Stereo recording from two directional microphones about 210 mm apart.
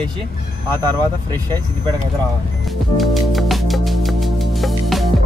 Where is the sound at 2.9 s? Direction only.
Centre (ahead or behind).